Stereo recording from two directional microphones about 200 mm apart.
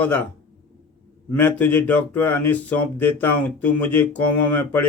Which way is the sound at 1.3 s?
10° left (ahead or behind).